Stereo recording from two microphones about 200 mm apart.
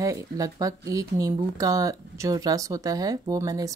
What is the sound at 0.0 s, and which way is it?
Speech, 15° right (ahead or behind).